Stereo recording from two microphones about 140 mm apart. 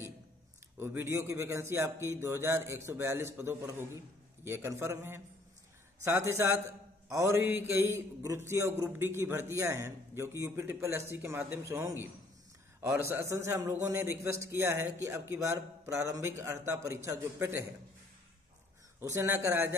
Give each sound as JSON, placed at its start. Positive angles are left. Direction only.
{"t": 0.7, "sound": "a man's voice", "side_deg": -15}
{"t": 18.9, "sound": "a man's voice", "side_deg": -20}